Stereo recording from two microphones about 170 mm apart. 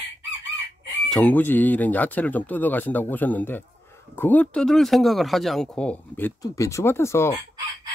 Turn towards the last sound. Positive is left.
turn(degrees=15)  # may be behind; listen again after turning